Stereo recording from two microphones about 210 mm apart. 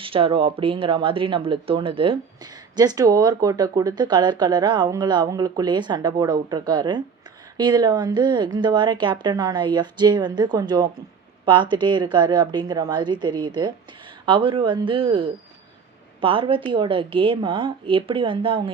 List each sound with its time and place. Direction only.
0.0 s speech: 25° right (ahead or behind)